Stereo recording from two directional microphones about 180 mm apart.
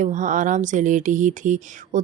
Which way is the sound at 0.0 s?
45° right (ahead or behind).